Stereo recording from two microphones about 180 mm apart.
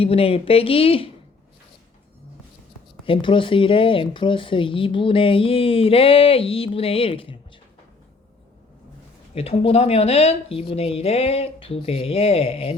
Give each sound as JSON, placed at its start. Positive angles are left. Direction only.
{"t": 0.0, "sound": "speech", "side_deg": 30}
{"t": 3.1, "sound": "speech", "side_deg": 30}
{"t": 9.3, "sound": "speech", "side_deg": 35}